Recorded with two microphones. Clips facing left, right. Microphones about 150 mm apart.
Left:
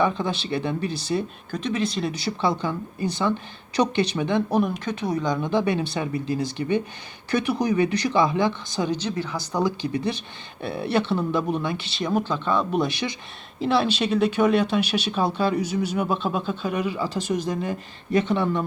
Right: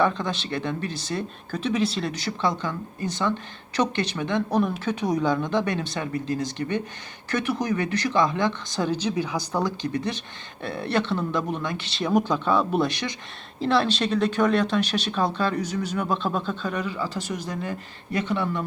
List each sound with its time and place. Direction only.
0.0 s speech: 10° left (ahead or behind)
1.5 s speech: 5° right (ahead or behind)
2.0 s speech: 10° left (ahead or behind)
4.9 s speech: 10° right (ahead or behind)
5.4 s speech: 5° left (ahead or behind)
9.0 s speech: 10° right (ahead or behind)
9.6 s speech: 10° left (ahead or behind)
12.0 s speech: 10° right (ahead or behind)
16.7 s speech: 15° left (ahead or behind)